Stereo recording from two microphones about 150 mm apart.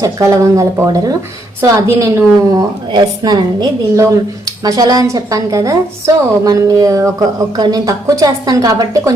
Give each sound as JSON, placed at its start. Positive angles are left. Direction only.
{"t": 0.0, "sound": "a woman's voice", "side_deg": -20}